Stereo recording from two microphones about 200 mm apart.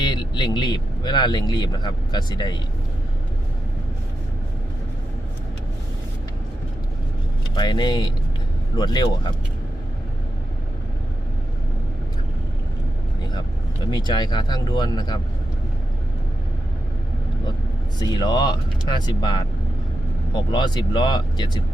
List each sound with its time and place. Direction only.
0.0 s speech: 20° left (ahead or behind)
7.5 s speech: 20° left (ahead or behind)
13.9 s speech: 20° left (ahead or behind)
18.0 s speech: 20° left (ahead or behind)
20.5 s speech: 20° left (ahead or behind)